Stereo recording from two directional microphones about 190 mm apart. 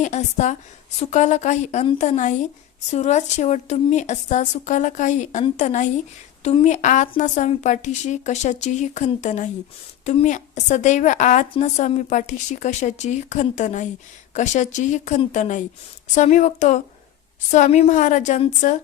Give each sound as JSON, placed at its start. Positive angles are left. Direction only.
{"t": 0.0, "sound": "a woman's voice", "side_deg": 40}